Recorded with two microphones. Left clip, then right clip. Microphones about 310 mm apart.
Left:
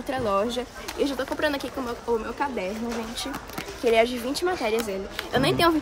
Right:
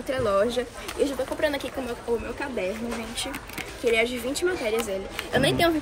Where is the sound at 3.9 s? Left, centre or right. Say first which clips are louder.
Left 3 dB; left.